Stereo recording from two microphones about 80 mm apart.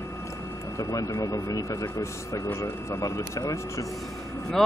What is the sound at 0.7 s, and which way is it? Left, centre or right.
Speech, left.